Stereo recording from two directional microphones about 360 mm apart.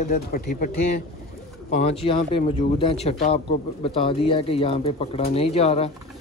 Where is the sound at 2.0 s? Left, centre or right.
Centre.